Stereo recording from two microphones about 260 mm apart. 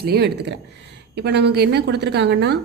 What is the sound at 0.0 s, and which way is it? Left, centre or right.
A woman's voice, right.